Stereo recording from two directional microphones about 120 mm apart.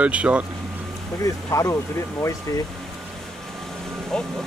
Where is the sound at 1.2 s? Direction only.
25° left (ahead or behind).